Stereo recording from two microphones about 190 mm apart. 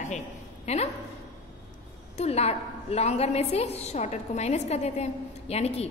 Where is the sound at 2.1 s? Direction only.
35° left (ahead or behind).